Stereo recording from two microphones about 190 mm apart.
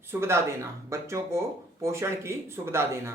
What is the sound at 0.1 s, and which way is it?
Speech, 15° right (ahead or behind).